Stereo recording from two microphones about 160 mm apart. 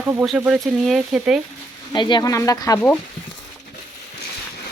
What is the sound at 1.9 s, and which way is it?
Speech, 30° left (ahead or behind).